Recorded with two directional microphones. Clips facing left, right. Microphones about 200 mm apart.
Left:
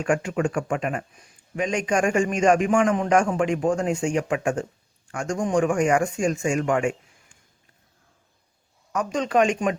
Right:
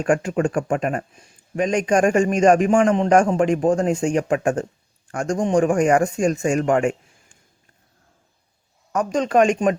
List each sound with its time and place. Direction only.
0.0 s a man's voice: 35° right (ahead or behind)
8.9 s speech: 45° right (ahead or behind)